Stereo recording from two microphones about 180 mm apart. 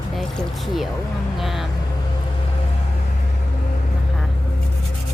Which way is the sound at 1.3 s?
Centre (ahead or behind).